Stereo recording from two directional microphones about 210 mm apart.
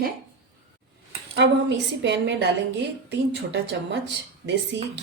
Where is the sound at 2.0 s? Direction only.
55° right (ahead or behind).